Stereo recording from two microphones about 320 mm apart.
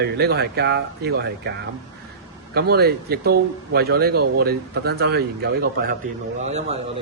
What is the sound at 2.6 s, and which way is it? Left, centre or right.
A man's voice, right.